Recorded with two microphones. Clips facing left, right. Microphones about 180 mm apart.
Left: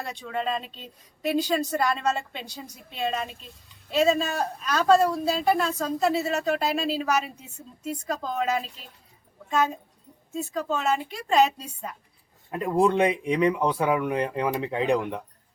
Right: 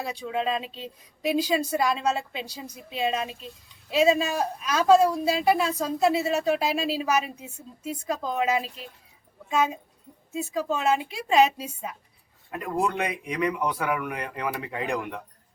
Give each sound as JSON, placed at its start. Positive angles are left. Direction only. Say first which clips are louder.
{"t": 0.0, "sound": "speech", "louder": "right 2 dB", "side_deg": -5}
{"t": 12.5, "sound": "speech", "louder": "left 5 dB", "side_deg": 25}